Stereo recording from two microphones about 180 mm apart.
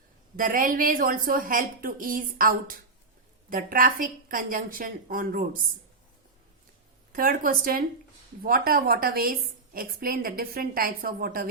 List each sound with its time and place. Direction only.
0.3 s a woman's voice: 50° right (ahead or behind)
7.1 s a woman's voice: 50° right (ahead or behind)